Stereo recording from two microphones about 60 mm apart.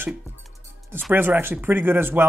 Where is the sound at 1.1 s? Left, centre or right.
Right.